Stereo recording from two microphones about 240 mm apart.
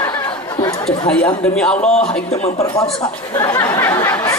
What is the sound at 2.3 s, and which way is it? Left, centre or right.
A woman's voice, left.